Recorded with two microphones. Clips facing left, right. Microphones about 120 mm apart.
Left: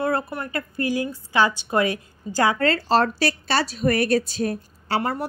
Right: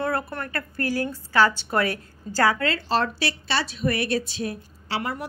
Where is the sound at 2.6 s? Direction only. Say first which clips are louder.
Left 4 dB; 40° left (ahead or behind).